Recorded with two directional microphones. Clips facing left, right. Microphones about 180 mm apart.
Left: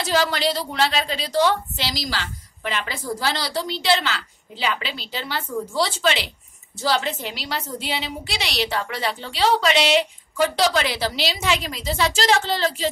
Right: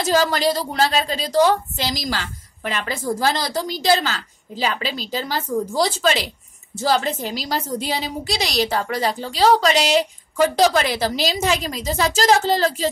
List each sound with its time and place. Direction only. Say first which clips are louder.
0.0 s a woman's voice: right 3 dB; 40° right (ahead or behind)